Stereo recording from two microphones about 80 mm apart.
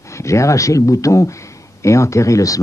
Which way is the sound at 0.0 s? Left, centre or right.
Left.